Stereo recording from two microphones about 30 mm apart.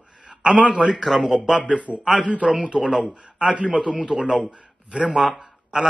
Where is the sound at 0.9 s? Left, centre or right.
Centre.